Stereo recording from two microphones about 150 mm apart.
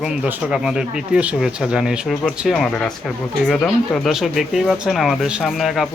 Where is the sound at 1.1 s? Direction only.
5° right (ahead or behind).